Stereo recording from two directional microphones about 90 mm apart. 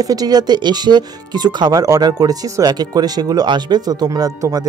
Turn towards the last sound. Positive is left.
turn(degrees=-40)  # may be behind; listen again after turning